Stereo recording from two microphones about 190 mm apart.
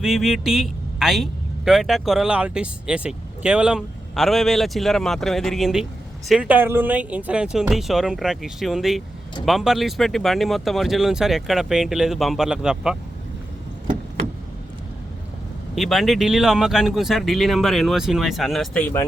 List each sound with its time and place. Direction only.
0.0 s a man's voice: centre (ahead or behind)
15.7 s a man's voice: centre (ahead or behind)